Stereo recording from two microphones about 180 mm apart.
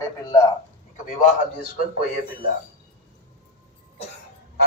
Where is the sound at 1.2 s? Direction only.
55° left (ahead or behind).